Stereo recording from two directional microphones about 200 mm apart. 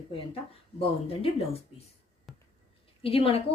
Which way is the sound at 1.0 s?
30° left (ahead or behind).